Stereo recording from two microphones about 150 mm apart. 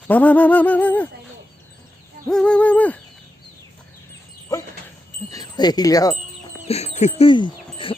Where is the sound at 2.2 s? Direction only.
5° left (ahead or behind).